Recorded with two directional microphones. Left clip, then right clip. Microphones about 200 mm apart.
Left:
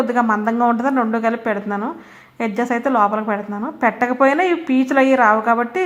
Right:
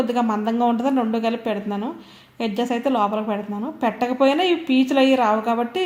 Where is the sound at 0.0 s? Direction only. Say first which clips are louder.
Left 4 dB; 10° left (ahead or behind).